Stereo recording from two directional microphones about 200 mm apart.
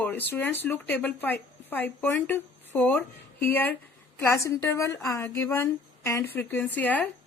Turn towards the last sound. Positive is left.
turn(degrees=10)  # may be behind; listen again after turning